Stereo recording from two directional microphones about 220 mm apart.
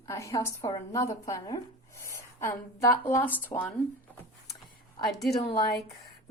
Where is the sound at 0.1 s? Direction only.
15° left (ahead or behind).